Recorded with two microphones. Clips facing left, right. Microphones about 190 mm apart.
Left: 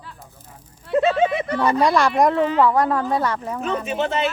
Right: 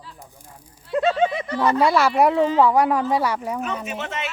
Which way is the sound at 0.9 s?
60° left (ahead or behind).